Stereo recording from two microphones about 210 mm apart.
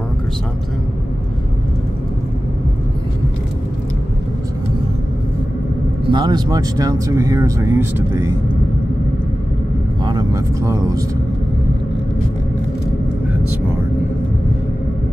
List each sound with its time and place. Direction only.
6.0 s speech: 20° right (ahead or behind)
10.0 s speech: 20° right (ahead or behind)